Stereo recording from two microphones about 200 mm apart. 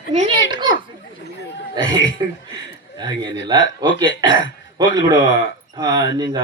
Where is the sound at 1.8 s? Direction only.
70° left (ahead or behind).